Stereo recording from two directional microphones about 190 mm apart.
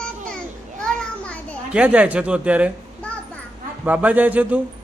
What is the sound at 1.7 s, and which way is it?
A man's voice, 5° right (ahead or behind).